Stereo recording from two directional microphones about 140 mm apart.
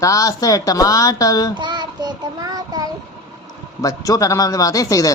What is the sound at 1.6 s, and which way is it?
Child singing, 30° right (ahead or behind).